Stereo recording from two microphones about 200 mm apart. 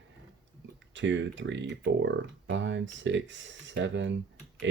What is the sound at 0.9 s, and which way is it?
Speech, 65° right (ahead or behind).